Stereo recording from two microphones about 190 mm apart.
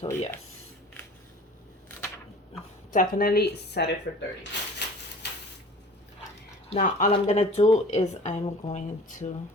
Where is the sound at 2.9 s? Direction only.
50° left (ahead or behind).